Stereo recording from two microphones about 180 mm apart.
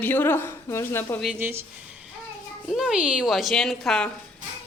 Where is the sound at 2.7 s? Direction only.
Centre (ahead or behind).